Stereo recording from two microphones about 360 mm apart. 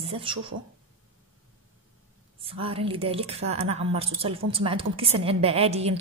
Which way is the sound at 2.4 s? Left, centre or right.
Centre.